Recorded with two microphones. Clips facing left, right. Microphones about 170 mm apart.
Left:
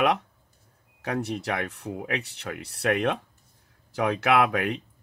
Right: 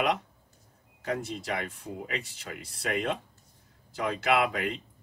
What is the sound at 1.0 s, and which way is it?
Speech, 65° left (ahead or behind).